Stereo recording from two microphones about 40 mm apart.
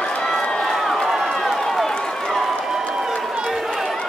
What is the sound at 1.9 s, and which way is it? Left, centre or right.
Run, centre.